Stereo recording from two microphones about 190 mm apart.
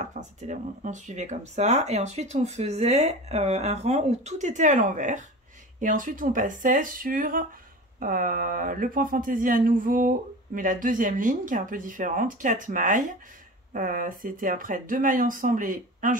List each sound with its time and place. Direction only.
0.0 s speech: 40° right (ahead or behind)